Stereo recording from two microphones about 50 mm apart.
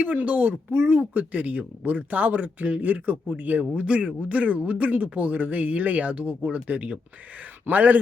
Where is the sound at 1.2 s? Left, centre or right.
Right.